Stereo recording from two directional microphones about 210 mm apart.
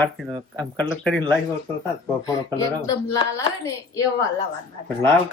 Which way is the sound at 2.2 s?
15° left (ahead or behind).